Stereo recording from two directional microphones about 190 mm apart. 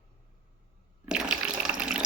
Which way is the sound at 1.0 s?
5° right (ahead or behind).